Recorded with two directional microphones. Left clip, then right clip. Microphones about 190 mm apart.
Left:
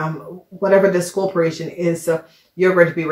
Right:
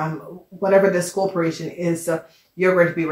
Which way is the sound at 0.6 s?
35° left (ahead or behind).